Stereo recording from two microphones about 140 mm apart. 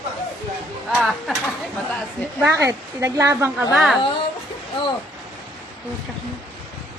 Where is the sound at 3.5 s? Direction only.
Centre (ahead or behind).